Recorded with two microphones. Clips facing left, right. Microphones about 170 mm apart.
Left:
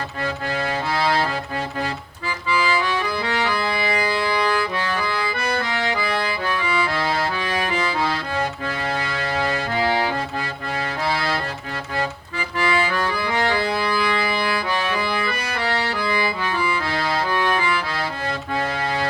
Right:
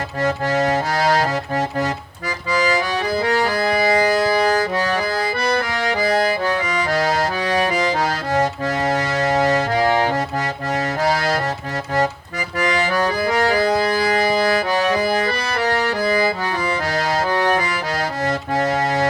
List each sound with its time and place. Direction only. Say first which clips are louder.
0.2 s accordion: right 7 dB; 45° right (ahead or behind)
12.5 s accordion: right 2 dB; 40° right (ahead or behind)
18.3 s music: right 7 dB; 45° right (ahead or behind)